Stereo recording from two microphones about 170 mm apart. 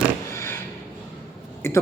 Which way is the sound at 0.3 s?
15° left (ahead or behind).